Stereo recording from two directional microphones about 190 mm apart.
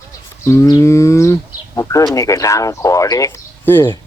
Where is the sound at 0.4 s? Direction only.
15° left (ahead or behind).